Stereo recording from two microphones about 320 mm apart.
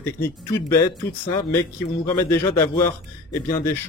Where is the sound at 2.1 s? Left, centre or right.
Centre.